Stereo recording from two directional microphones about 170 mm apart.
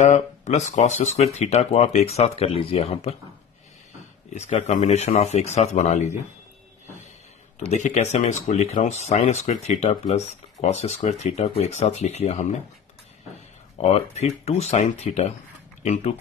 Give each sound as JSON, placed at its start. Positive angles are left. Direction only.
{"t": 0.0, "sound": "speech", "side_deg": 45}
{"t": 4.3, "sound": "speech", "side_deg": 45}
{"t": 7.7, "sound": "speech", "side_deg": 40}
{"t": 13.7, "sound": "speech", "side_deg": 40}